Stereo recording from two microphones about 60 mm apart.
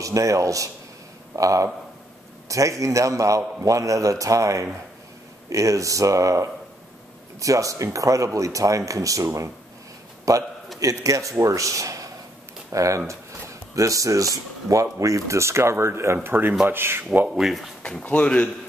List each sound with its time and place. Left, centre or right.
0.0 s speech: right
16.2 s speech: right
17.3 s speech: centre
18.0 s a man's voice: centre